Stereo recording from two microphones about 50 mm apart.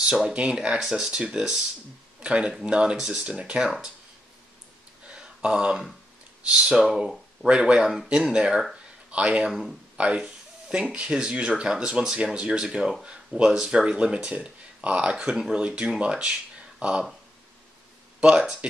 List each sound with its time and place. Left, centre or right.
0.0 s speech: centre
0.3 s speech: right
0.6 s speech: centre
5.0 s a sound: centre
6.4 s speech: centre
18.2 s speech: right